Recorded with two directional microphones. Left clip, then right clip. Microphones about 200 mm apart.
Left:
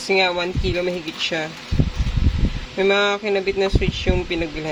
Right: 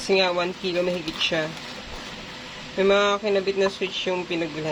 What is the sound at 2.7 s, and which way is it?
Speech, 15° left (ahead or behind).